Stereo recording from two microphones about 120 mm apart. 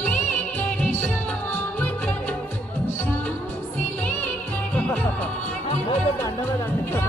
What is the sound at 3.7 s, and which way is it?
Music, 15° left (ahead or behind).